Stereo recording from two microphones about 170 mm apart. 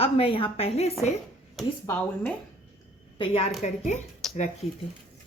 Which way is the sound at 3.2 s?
35° left (ahead or behind).